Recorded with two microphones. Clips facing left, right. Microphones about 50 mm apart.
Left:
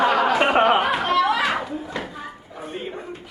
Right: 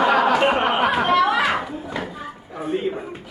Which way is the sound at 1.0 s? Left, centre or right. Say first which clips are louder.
Right 2 dB; centre.